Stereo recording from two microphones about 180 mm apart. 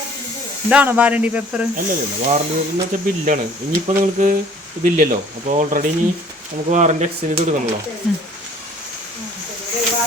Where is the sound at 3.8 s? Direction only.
45° right (ahead or behind).